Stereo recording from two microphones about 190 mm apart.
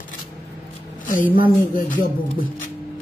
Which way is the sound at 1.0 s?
45° left (ahead or behind).